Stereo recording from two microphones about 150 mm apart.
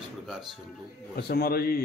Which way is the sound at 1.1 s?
90° left.